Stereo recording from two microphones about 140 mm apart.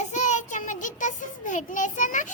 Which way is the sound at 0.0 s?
60° left (ahead or behind).